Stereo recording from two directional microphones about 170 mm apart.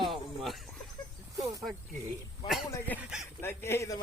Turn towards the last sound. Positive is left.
turn(degrees=15)  # may be behind; listen again after turning